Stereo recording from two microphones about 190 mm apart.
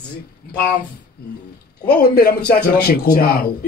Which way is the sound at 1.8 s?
55° left (ahead or behind).